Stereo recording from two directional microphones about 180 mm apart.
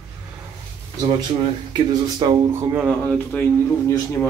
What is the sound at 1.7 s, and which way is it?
Speech, 25° right (ahead or behind).